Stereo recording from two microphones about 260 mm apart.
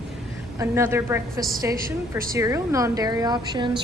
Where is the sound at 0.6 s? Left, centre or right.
Centre.